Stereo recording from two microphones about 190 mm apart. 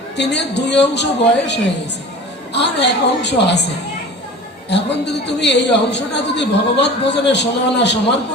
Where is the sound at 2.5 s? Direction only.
65° left (ahead or behind).